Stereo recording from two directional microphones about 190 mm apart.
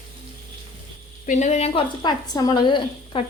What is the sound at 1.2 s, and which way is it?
A woman's voice, 40° left (ahead or behind).